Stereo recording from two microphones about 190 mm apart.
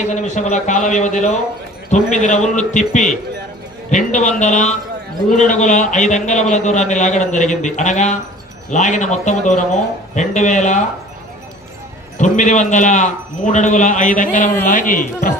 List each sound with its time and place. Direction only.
0.1 s a man's voice: 40° left (ahead or behind)
12.2 s a man's voice: 40° left (ahead or behind)